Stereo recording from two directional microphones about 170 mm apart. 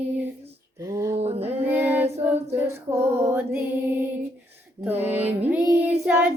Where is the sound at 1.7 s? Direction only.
10° right (ahead or behind).